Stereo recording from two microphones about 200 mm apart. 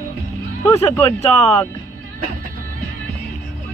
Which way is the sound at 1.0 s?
30° left (ahead or behind).